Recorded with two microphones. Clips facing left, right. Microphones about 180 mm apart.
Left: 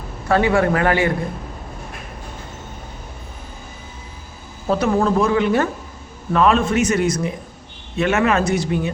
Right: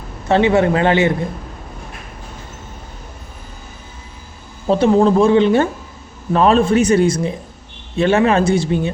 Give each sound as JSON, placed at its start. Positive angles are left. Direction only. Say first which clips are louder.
{"t": 0.3, "sound": "speech", "louder": "right 3 dB", "side_deg": -25}
{"t": 4.7, "sound": "a man's voice", "louder": "right 5 dB", "side_deg": -25}